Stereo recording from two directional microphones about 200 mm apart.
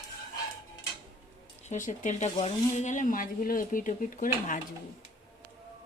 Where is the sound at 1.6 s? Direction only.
40° left (ahead or behind).